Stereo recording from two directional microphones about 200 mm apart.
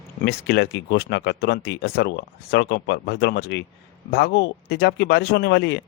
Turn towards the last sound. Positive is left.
turn(degrees=60)  # may be behind; listen again after turning